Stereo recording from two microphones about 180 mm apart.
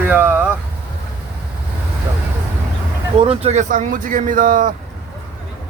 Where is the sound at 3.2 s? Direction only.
30° right (ahead or behind); by 4.7 s 50° right (ahead or behind).